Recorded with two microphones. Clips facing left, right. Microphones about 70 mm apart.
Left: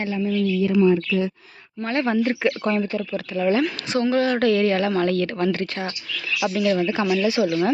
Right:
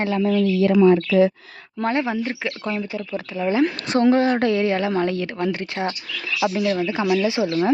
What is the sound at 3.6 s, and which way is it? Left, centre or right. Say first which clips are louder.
Speech: right 4 dB; right.